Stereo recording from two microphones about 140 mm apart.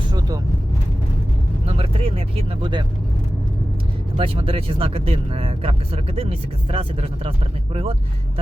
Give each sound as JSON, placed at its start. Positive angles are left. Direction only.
{"t": 1.6, "sound": "vehicle", "side_deg": -45}
{"t": 4.2, "sound": "speech", "side_deg": -40}